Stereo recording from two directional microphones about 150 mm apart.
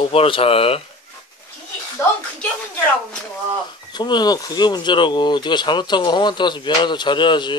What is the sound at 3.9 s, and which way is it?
Speech, 30° left (ahead or behind).